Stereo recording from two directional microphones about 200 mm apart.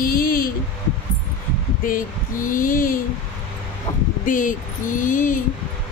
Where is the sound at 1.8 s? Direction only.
45° left (ahead or behind).